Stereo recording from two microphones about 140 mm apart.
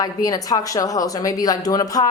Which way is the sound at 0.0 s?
25° left (ahead or behind).